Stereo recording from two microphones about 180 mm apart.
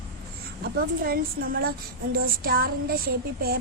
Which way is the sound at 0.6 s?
55° right (ahead or behind).